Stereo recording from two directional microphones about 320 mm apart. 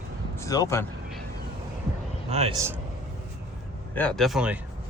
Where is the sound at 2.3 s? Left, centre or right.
Centre.